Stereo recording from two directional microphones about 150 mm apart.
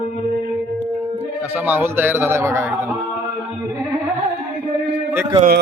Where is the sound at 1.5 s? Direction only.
10° right (ahead or behind).